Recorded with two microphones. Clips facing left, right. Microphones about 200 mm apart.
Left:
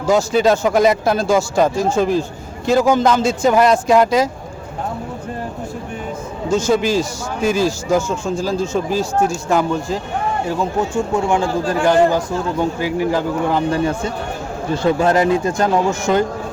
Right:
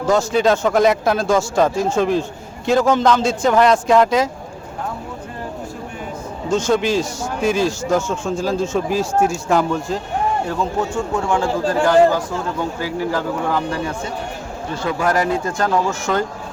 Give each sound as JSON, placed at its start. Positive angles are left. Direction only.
{"t": 0.1, "sound": "a man's voice", "side_deg": 5}
{"t": 6.5, "sound": "a man's voice", "side_deg": 5}